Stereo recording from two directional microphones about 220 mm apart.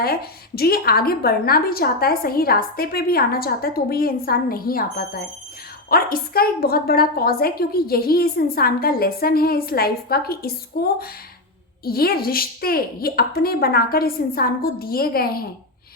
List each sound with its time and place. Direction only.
0.0 s a woman's voice: 45° left (ahead or behind)